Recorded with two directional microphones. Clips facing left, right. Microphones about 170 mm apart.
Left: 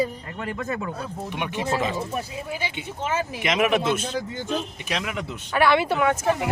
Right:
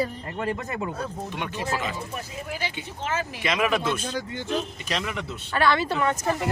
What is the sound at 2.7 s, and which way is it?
Speech, 20° left (ahead or behind).